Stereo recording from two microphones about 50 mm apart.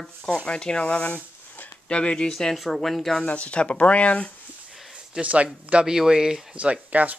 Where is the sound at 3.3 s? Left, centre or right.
Left.